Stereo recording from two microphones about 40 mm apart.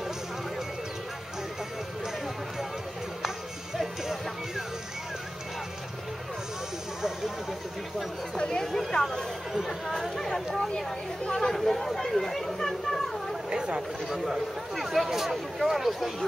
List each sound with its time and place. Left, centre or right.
3.7 s music: centre
8.4 s speech: centre
9.5 s speech: centre
9.8 s speech: centre
11.3 s chatter: centre
13.5 s chatter: right
14.0 s speech: centre